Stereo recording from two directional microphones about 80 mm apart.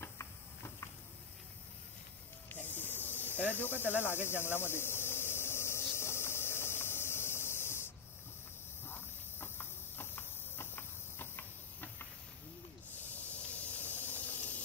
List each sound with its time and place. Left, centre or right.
2.5 s snake: left
3.6 s speech: left
4.0 s a sound: left
12.9 s hiss: left